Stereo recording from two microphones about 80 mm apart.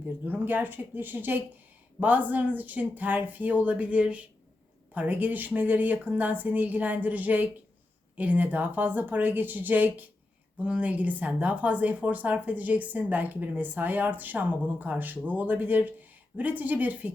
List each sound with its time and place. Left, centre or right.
0.3 s a woman's voice: right